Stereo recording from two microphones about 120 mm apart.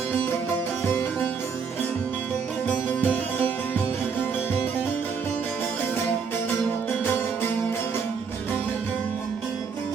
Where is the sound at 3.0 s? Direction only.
15° left (ahead or behind).